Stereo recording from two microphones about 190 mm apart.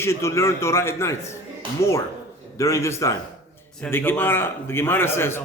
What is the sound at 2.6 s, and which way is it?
A man's voice, 15° left (ahead or behind).